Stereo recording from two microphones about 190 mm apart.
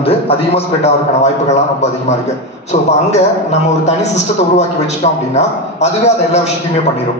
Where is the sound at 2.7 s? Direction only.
40° left (ahead or behind).